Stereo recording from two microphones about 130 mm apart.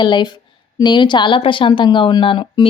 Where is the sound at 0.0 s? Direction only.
35° left (ahead or behind).